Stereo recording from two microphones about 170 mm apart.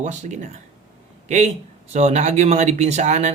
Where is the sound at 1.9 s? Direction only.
40° right (ahead or behind).